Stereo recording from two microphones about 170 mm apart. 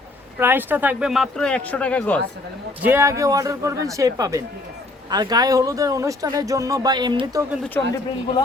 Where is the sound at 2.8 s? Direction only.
15° right (ahead or behind).